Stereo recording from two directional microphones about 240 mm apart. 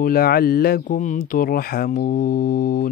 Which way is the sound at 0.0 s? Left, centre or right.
Left.